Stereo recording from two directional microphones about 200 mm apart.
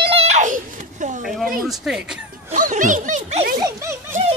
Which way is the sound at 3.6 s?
15° right (ahead or behind).